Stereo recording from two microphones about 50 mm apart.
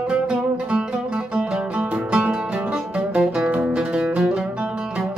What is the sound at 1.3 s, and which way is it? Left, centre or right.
Music, right.